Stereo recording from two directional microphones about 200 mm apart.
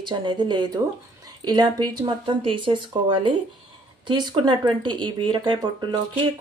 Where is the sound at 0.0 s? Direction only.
25° right (ahead or behind).